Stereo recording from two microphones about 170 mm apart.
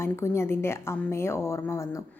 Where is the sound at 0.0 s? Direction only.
15° left (ahead or behind).